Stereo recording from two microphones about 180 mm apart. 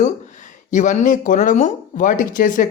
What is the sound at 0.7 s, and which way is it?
Speech, 45° left (ahead or behind).